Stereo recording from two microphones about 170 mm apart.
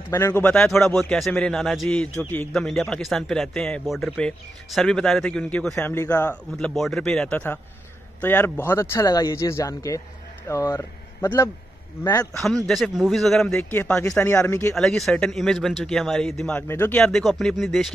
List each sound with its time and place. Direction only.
0.1 s a man's voice: 15° left (ahead or behind)
5.8 s speech: 15° left (ahead or behind)
6.6 s a man's voice: centre (ahead or behind); by 12.3 s 15° left (ahead or behind)
12.6 s a man's voice: centre (ahead or behind)
14.8 s a man's voice: 5° left (ahead or behind)